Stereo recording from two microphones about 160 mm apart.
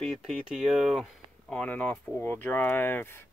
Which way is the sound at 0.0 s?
Centre (ahead or behind).